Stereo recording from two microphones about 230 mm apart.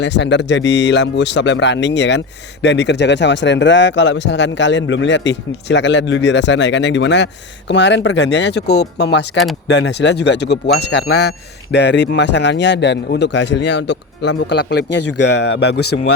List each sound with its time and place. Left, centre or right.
0.0 s speech: left